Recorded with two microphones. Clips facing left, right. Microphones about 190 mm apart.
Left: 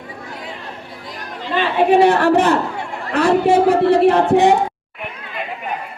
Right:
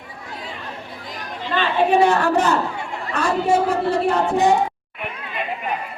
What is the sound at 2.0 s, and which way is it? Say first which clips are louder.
A woman's voice: left 5 dB; 60° left (ahead or behind).